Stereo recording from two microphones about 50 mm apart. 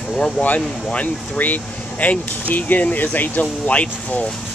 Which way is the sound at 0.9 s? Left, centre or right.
Left.